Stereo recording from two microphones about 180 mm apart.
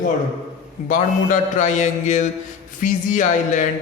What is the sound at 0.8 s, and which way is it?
A woman's voice, 45° left (ahead or behind).